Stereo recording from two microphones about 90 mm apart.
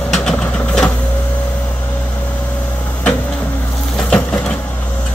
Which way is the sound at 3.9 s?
10° left (ahead or behind).